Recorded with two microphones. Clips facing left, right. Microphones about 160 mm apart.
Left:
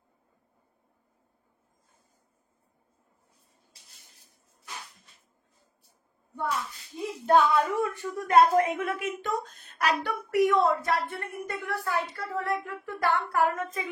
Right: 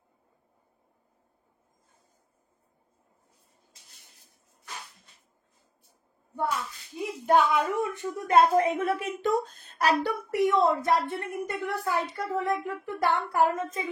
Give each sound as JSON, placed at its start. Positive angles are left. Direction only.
{"t": 6.4, "sound": "a woman's voice", "side_deg": -30}
{"t": 7.2, "sound": "a woman's voice", "side_deg": -15}